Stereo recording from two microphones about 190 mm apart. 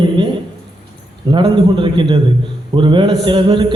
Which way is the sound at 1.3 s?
25° right (ahead or behind).